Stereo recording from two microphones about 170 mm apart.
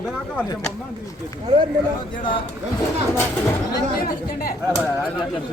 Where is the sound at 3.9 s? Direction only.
60° left (ahead or behind).